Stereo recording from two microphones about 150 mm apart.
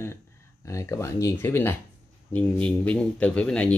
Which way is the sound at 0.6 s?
20° left (ahead or behind).